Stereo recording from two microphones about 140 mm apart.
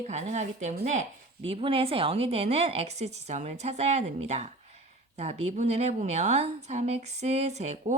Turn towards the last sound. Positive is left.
turn(degrees=-55)  # may be behind; listen again after turning